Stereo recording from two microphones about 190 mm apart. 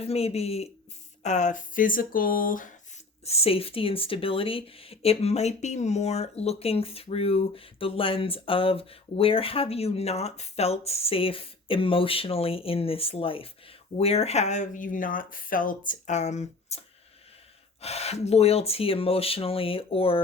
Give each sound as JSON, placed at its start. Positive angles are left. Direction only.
{"t": 0.0, "sound": "speech", "side_deg": 30}
{"t": 3.2, "sound": "speech", "side_deg": 30}